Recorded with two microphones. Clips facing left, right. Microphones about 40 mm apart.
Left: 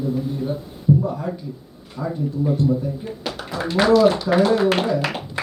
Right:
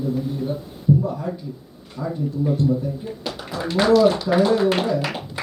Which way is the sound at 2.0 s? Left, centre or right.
Left.